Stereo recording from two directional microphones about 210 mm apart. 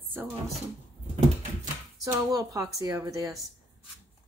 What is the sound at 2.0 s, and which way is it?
Speech, 15° right (ahead or behind).